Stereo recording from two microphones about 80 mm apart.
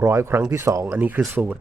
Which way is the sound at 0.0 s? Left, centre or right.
Right.